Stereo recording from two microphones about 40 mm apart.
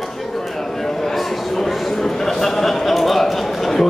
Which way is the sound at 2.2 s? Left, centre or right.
Centre.